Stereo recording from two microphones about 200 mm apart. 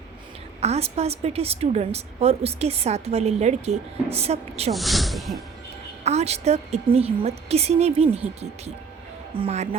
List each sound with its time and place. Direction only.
0.6 s a woman's voice: 30° right (ahead or behind)
4.7 s speech: centre (ahead or behind)
6.1 s a woman's voice: 35° right (ahead or behind)
9.4 s a woman's voice: 30° right (ahead or behind)